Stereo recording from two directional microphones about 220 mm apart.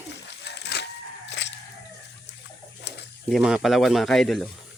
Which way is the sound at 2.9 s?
50° left (ahead or behind).